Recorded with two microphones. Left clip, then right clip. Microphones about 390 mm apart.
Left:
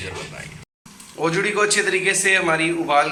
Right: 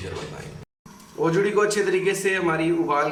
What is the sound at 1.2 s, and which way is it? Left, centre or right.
A man's voice, centre.